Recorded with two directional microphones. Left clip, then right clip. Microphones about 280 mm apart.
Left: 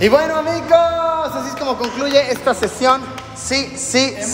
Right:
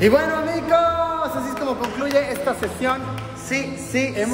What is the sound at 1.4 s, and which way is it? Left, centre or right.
Speech, left.